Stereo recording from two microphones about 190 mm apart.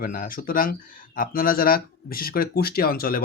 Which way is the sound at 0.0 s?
45° left (ahead or behind).